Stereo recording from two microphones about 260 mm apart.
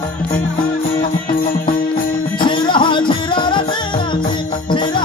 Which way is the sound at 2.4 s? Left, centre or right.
Centre.